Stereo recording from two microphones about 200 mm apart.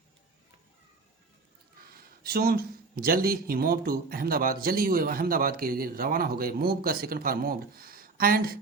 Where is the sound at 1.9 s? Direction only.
50° right (ahead or behind).